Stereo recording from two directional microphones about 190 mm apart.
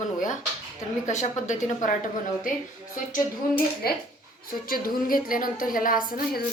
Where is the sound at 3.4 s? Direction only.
50° left (ahead or behind).